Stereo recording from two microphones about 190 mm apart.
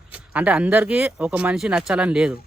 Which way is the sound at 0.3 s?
5° right (ahead or behind).